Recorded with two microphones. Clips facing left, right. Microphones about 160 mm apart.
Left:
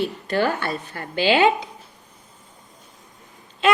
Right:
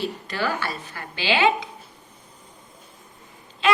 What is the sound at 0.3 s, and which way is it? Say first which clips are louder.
Speech: left 7 dB; 55° left (ahead or behind).